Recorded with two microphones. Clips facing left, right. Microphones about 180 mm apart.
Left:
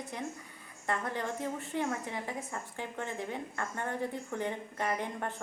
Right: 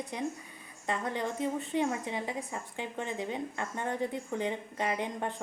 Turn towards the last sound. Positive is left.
turn(degrees=-15)  # may be behind; listen again after turning